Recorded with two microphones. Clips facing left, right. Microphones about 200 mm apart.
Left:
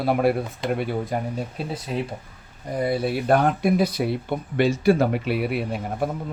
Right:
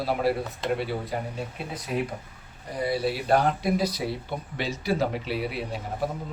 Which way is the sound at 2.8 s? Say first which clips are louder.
Left 3 dB; 55° left (ahead or behind).